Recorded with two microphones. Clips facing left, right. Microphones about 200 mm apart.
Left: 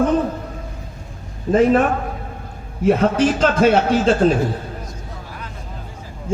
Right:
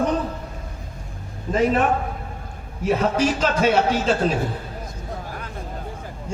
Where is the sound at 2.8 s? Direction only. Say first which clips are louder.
Left 5 dB; 50° left (ahead or behind).